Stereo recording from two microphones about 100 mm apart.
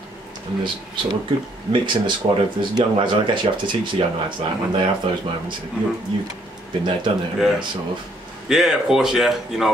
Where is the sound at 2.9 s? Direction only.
55° right (ahead or behind).